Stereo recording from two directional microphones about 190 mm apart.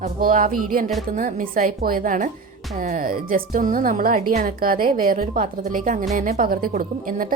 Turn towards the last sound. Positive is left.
turn(degrees=-45)  # may be behind; listen again after turning